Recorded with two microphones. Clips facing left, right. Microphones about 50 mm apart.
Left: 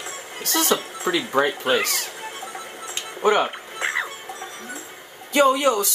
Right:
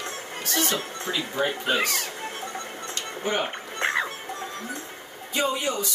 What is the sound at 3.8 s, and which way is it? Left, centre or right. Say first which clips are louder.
Music: even; centre.